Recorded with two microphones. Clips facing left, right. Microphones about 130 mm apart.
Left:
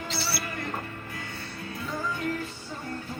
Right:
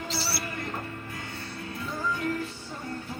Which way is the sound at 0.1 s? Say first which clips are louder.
Left 1 dB; 35° right (ahead or behind).